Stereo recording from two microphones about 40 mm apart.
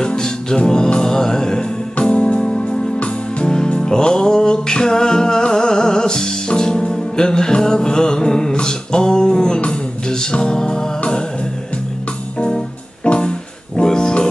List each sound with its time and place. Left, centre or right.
0.0 s music: centre
0.9 s mantra: centre
2.0 s music: left
12.4 s music: left